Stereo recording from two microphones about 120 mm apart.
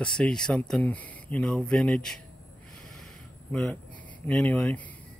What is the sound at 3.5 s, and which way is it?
Speech, 10° left (ahead or behind).